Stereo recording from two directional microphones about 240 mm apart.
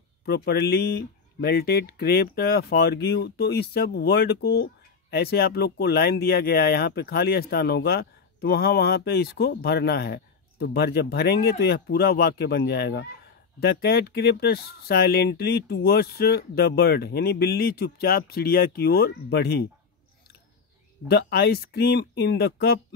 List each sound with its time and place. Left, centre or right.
0.2 s speech: left
21.1 s speech: left